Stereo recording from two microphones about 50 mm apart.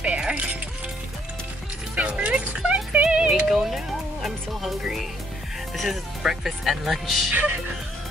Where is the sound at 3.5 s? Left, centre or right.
Centre.